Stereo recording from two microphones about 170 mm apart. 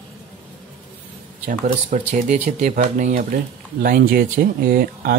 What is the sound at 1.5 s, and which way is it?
Speech, 50° right (ahead or behind).